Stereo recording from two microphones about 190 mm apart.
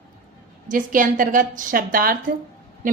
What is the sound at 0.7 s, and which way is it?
A woman's voice, 45° right (ahead or behind).